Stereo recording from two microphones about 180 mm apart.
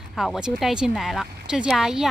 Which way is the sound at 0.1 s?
Centre (ahead or behind).